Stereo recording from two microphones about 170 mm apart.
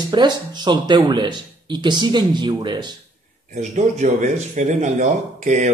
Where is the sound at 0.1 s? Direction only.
25° right (ahead or behind).